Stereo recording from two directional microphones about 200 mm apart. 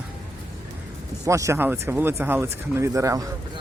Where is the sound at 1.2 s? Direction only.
15° right (ahead or behind).